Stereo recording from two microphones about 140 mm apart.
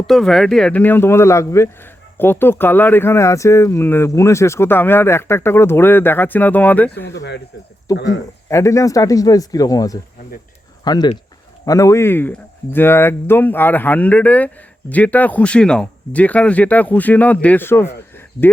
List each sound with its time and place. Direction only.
0.1 s speech: 5° left (ahead or behind)
7.9 s speech: 25° left (ahead or behind)